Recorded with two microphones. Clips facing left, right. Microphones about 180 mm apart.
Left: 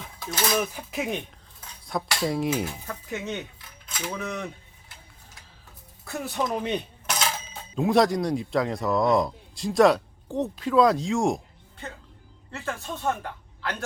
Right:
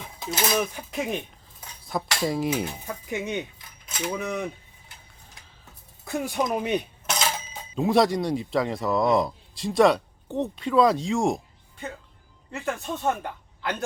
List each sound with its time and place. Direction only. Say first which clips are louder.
0.2 s speech: right 2 dB; 25° right (ahead or behind)
0.5 s a man's voice: right 1 dB; centre (ahead or behind)
2.6 s speech: right 1 dB; 20° right (ahead or behind)
6.1 s a man's voice: right 2 dB; 15° right (ahead or behind)
12.5 s speech: right 3 dB; 15° right (ahead or behind)